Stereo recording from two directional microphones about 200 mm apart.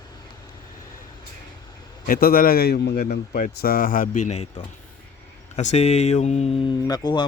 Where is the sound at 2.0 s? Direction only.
45° left (ahead or behind).